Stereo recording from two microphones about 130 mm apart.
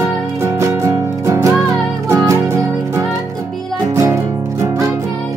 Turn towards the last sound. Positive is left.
turn(degrees=-20)  # may be behind; listen again after turning